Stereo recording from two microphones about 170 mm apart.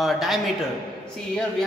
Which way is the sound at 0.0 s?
Centre (ahead or behind).